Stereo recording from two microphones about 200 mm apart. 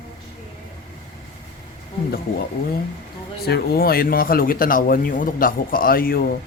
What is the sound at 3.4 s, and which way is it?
Speech, 50° left (ahead or behind).